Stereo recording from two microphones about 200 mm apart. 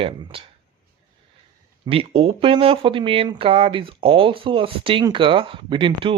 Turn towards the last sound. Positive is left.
turn(degrees=-25)  # may be behind; listen again after turning